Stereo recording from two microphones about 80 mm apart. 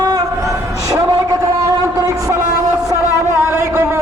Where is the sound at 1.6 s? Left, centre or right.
Right.